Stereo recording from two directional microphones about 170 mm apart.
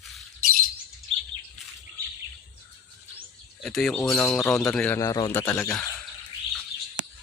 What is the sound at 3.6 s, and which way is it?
Speech, centre (ahead or behind).